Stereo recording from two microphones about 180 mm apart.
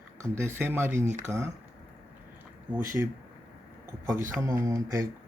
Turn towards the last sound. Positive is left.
turn(degrees=-20)  # may be behind; listen again after turning